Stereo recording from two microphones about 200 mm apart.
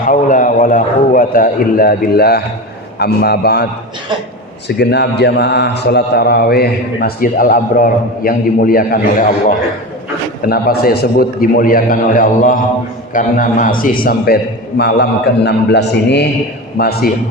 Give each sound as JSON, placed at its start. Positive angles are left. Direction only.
{"t": 0.1, "sound": "a man's voice", "side_deg": 40}
{"t": 4.8, "sound": "a man's voice", "side_deg": 55}